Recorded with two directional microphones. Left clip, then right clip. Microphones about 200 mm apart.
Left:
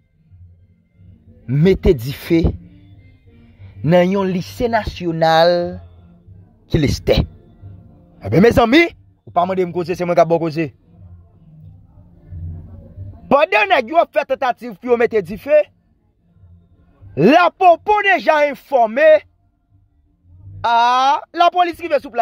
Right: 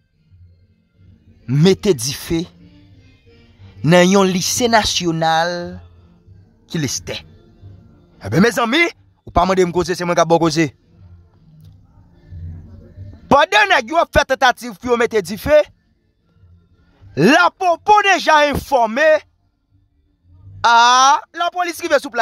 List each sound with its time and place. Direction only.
1.4 s speech: 10° right (ahead or behind)
3.8 s speech: 20° right (ahead or behind)
5.2 s speech: 10° left (ahead or behind)
8.2 s a man's voice: centre (ahead or behind)
9.3 s a man's voice: 25° right (ahead or behind)
9.9 s a man's voice: 5° right (ahead or behind)
10.3 s a man's voice: 20° right (ahead or behind)
13.3 s speech: 5° right (ahead or behind)
15.2 s a man's voice: 20° right (ahead or behind)
17.1 s a man's voice: 5° right (ahead or behind)
20.6 s speech: 10° right (ahead or behind)
21.2 s speech: 15° left (ahead or behind)
21.6 s speech: 15° right (ahead or behind)